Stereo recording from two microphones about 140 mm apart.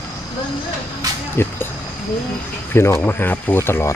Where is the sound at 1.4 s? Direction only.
15° left (ahead or behind).